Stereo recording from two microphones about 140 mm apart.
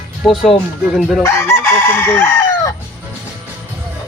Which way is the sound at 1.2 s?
20° left (ahead or behind).